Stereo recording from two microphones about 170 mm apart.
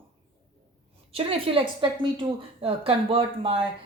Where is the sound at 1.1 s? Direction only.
30° right (ahead or behind).